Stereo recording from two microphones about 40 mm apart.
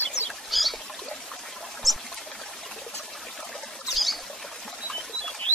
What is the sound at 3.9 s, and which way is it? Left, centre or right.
Rodents, centre.